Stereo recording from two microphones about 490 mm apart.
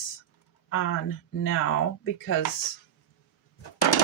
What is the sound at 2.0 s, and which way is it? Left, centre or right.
Speech, left.